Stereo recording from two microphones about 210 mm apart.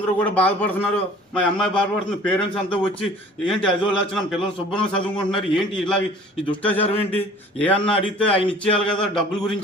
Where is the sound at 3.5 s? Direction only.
25° left (ahead or behind).